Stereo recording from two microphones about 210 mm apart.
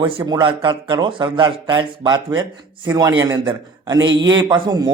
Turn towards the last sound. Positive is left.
turn(degrees=-20)  # may be behind; listen again after turning